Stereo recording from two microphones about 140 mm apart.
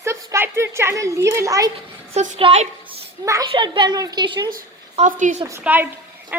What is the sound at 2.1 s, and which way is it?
Speech, 45° right (ahead or behind).